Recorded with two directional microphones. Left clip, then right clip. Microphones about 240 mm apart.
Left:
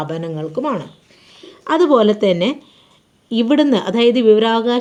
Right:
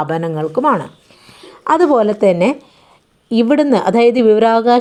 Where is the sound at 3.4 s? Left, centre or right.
Centre.